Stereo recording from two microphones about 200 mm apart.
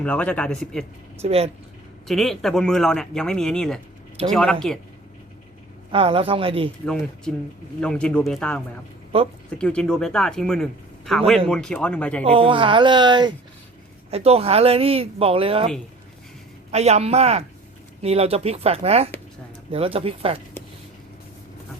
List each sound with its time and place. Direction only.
0.0 s speech: 5° left (ahead or behind)
1.2 s speech: 30° right (ahead or behind)
2.0 s speech: centre (ahead or behind)
5.9 s speech: 25° right (ahead or behind)
6.8 s speech: 5° left (ahead or behind)
9.1 s speech: 30° right (ahead or behind)
9.6 s speech: 5° left (ahead or behind)
12.2 s speech: 30° right (ahead or behind)
16.7 s speech: 35° right (ahead or behind)